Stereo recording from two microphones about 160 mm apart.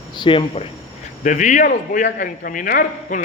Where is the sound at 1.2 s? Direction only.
50° left (ahead or behind).